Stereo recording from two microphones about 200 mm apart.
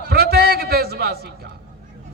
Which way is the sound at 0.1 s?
55° right (ahead or behind).